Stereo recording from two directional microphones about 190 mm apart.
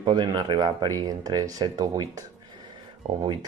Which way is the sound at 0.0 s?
25° right (ahead or behind).